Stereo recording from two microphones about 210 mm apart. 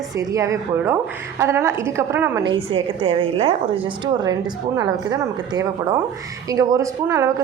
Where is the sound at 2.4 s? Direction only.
25° right (ahead or behind).